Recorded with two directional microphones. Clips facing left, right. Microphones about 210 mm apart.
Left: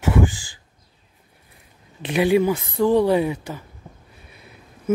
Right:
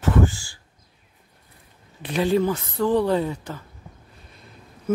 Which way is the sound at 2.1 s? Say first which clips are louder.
Left 3 dB; 10° left (ahead or behind).